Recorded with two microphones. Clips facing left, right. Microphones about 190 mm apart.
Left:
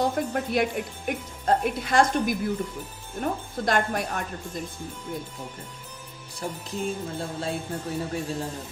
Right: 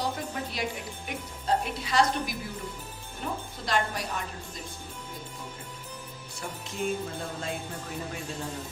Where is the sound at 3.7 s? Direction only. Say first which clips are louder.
Left 4 dB; 55° left (ahead or behind).